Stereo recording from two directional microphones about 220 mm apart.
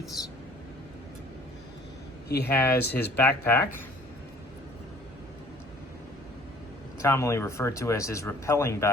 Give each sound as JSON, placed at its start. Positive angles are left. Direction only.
{"t": 0.2, "sound": "speech", "side_deg": 15}
{"t": 2.5, "sound": "speech", "side_deg": 10}
{"t": 7.0, "sound": "speech", "side_deg": 15}